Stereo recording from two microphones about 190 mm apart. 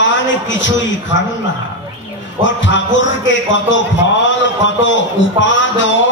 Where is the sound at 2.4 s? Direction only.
75° left (ahead or behind).